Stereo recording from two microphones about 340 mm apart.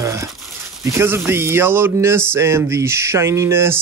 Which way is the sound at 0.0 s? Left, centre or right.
Centre.